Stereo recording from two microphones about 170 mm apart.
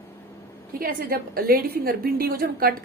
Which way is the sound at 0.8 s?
60° right (ahead or behind).